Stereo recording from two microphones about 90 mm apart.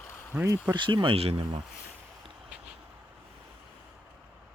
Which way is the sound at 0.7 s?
60° right (ahead or behind).